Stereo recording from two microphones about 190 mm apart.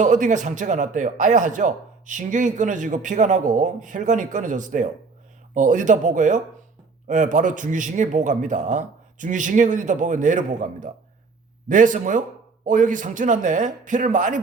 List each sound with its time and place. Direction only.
0.0 s a man's voice: 40° right (ahead or behind)